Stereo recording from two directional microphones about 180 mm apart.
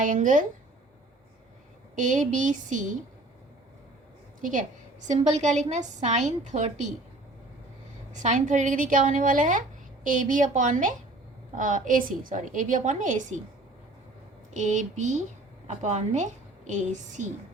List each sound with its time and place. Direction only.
0.0 s a woman's voice: 45° right (ahead or behind)
2.0 s a woman's voice: 45° right (ahead or behind)
4.4 s a woman's voice: 45° right (ahead or behind)
8.1 s a woman's voice: 45° right (ahead or behind)
14.5 s a woman's voice: 45° right (ahead or behind)